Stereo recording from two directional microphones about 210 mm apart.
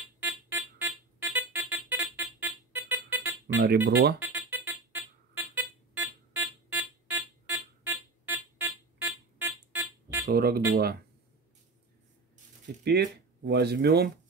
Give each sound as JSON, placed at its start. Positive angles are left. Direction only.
{"t": 0.2, "sound": "music", "side_deg": -10}
{"t": 3.6, "sound": "speech", "side_deg": -50}
{"t": 4.2, "sound": "music", "side_deg": -10}
{"t": 10.2, "sound": "speech", "side_deg": -45}
{"t": 12.8, "sound": "speech", "side_deg": -50}